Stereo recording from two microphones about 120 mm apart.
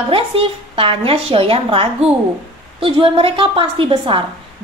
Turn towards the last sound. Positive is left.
turn(degrees=-45)  # may be behind; listen again after turning